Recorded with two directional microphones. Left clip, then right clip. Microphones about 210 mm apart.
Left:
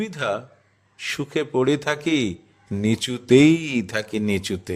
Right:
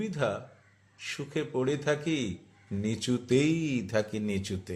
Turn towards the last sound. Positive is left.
turn(degrees=45)  # may be behind; listen again after turning